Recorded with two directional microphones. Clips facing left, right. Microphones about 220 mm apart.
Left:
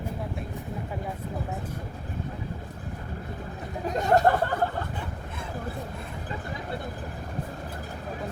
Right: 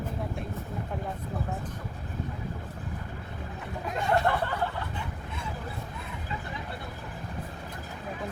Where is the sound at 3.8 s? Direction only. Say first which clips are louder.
Left 5 dB; 40° left (ahead or behind).